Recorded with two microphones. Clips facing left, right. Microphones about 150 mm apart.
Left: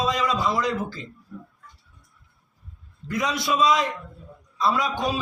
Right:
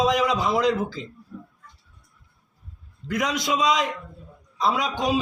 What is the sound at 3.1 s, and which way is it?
Speech, 20° right (ahead or behind).